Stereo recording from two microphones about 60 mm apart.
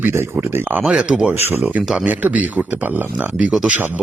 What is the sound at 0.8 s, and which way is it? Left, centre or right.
Speech, centre.